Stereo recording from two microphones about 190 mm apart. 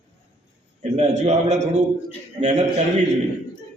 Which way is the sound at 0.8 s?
35° right (ahead or behind).